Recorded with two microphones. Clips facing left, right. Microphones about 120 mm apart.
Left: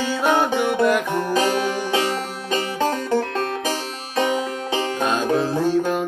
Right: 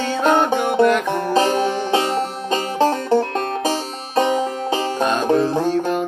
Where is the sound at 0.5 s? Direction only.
45° right (ahead or behind).